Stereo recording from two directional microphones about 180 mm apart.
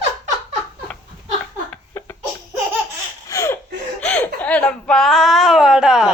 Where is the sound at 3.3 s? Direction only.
15° left (ahead or behind); by 6.1 s 5° right (ahead or behind).